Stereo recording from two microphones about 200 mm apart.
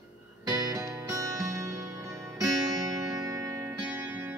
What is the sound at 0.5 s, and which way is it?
Music, 15° right (ahead or behind).